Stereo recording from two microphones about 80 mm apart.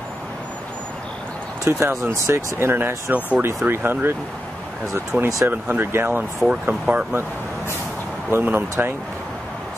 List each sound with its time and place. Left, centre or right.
1.6 s speech: right
5.1 s speech: centre
6.4 s speech: centre
8.3 s speech: right